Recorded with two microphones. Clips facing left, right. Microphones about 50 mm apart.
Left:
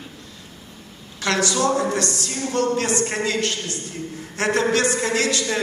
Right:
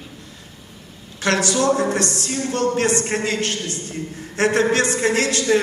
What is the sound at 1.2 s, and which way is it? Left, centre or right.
A man's voice, right.